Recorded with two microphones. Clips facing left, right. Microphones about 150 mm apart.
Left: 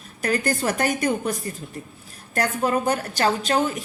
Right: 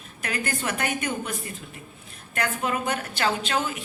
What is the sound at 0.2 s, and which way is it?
A woman's voice, 40° left (ahead or behind).